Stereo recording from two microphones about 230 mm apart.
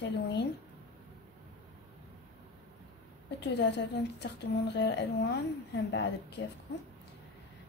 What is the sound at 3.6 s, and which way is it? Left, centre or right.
A woman's voice, left.